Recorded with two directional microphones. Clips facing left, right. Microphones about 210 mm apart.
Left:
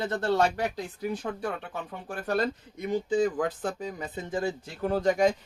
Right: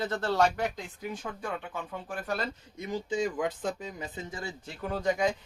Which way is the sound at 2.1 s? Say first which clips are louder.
Left 6 dB; 40° left (ahead or behind).